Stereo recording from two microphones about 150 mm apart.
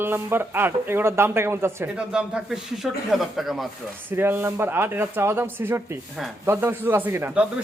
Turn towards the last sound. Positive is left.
turn(degrees=-15)  # may be behind; listen again after turning